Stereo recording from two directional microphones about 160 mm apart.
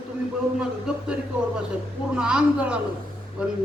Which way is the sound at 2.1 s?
5° right (ahead or behind).